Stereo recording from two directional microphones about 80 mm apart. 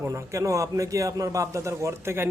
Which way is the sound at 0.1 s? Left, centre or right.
Right.